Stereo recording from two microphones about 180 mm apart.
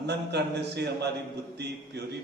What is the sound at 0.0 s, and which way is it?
A man's voice, 70° right (ahead or behind).